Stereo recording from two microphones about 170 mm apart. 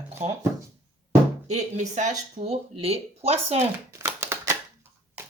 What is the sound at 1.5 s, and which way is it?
Speech, 45° right (ahead or behind).